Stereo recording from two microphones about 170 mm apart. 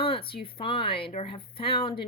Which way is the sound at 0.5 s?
30° left (ahead or behind).